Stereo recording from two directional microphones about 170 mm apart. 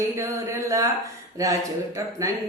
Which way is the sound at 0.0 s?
15° right (ahead or behind).